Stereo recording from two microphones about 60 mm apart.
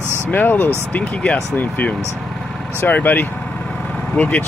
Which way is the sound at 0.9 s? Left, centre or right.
Left.